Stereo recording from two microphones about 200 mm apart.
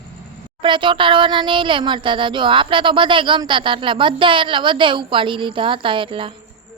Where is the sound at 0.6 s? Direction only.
25° right (ahead or behind).